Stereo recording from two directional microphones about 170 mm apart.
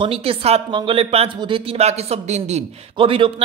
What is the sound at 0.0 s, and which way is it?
Speech, 35° right (ahead or behind).